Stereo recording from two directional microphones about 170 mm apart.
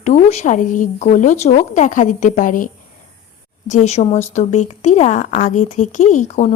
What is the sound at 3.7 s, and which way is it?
Speech, 40° left (ahead or behind).